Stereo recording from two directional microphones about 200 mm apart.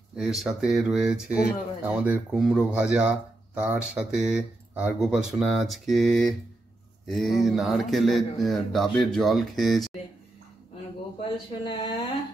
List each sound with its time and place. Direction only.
0.1 s speech: centre (ahead or behind)
11.2 s speech: 25° left (ahead or behind)